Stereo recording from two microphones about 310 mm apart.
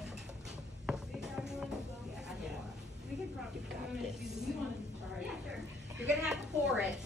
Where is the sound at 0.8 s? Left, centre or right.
Centre.